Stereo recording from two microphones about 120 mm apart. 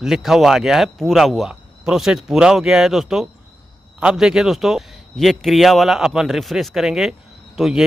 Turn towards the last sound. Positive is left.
turn(degrees=-5)  # may be behind; listen again after turning